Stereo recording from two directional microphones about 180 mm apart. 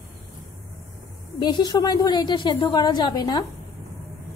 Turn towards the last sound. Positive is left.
turn(degrees=25)  # may be behind; listen again after turning